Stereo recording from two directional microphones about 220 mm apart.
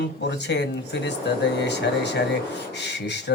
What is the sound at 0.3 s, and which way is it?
Mantra, 50° left (ahead or behind).